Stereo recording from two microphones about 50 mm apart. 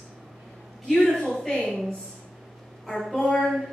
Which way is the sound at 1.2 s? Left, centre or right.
Centre.